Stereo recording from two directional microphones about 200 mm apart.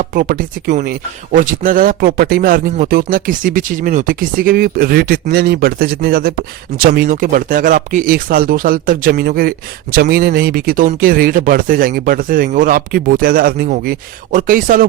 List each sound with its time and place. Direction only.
0.0 s speech: 40° right (ahead or behind)